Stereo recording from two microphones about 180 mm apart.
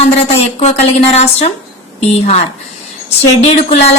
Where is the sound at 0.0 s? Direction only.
35° left (ahead or behind).